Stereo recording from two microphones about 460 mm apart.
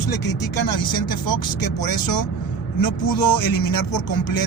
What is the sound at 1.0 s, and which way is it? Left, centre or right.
Speech, left.